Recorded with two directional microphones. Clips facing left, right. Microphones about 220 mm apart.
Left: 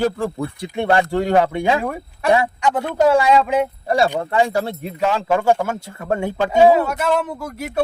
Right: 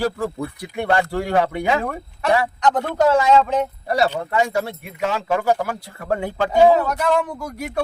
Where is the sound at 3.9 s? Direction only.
25° left (ahead or behind).